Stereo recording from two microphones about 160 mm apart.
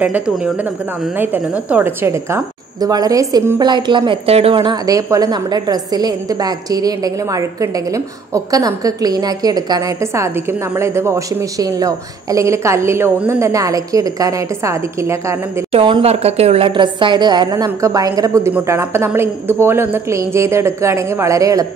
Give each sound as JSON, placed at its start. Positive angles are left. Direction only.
{"t": 0.0, "sound": "a woman's voice", "side_deg": -5}
{"t": 4.8, "sound": "a woman's voice", "side_deg": -20}
{"t": 15.7, "sound": "a woman's voice", "side_deg": -35}